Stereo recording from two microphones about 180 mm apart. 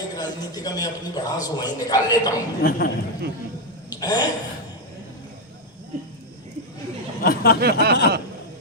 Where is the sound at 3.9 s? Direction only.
20° left (ahead or behind).